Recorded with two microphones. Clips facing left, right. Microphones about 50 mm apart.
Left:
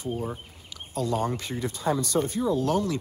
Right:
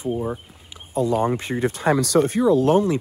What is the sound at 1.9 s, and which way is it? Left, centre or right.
Speech, right.